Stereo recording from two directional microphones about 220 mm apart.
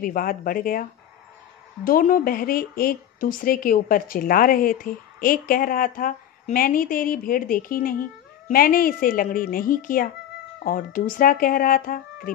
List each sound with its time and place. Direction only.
0.0 s speech: 40° left (ahead or behind)
1.9 s speech: 40° left (ahead or behind)